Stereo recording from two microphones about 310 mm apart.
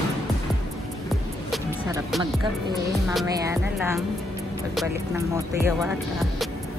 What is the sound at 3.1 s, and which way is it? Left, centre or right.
Speech, centre.